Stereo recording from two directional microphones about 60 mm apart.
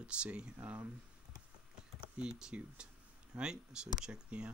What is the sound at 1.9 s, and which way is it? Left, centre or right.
Speech, centre.